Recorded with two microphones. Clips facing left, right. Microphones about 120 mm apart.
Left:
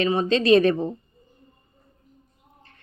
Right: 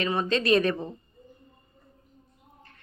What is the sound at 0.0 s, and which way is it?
Speech, 30° left (ahead or behind).